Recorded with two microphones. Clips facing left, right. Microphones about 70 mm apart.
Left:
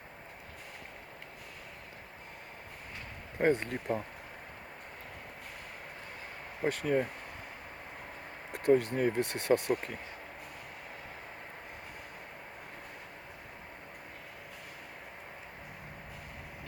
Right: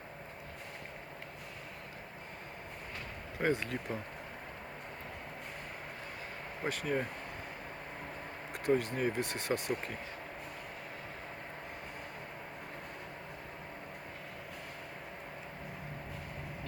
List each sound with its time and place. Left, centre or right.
3.4 s speech: left
6.7 s speech: left
8.5 s speech: left